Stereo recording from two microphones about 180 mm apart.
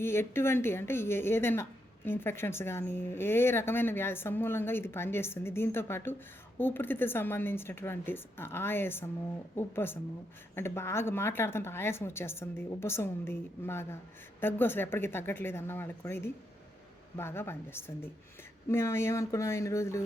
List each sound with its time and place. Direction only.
0.0 s a woman's voice: 15° left (ahead or behind)